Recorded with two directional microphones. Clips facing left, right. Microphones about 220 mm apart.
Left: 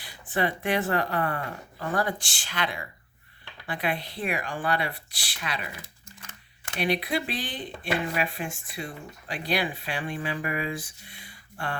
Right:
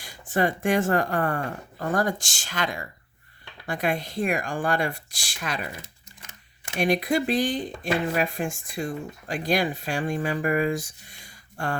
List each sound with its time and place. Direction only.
0.0 s speech: 45° right (ahead or behind)
6.7 s speech: 45° right (ahead or behind)